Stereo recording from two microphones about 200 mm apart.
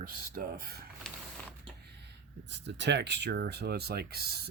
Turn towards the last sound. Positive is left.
turn(degrees=-50)  # may be behind; listen again after turning